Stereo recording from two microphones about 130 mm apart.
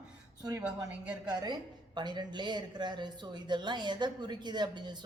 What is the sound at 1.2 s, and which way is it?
A woman's voice, 35° right (ahead or behind).